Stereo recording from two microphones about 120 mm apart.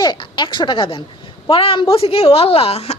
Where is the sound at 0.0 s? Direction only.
40° left (ahead or behind).